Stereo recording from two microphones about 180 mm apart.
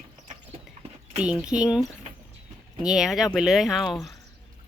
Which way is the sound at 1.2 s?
5° right (ahead or behind).